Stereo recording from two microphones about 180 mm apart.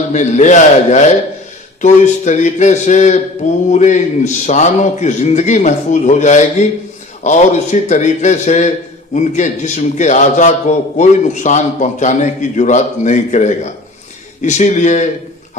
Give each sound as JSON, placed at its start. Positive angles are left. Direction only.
{"t": 0.1, "sound": "a man's voice", "side_deg": 40}